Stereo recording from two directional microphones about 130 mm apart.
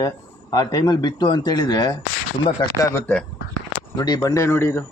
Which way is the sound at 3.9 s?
30° left (ahead or behind).